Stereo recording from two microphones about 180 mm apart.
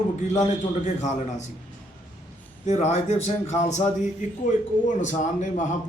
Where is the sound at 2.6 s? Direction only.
40° left (ahead or behind).